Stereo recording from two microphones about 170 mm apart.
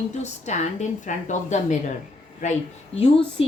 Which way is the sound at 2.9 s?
35° left (ahead or behind).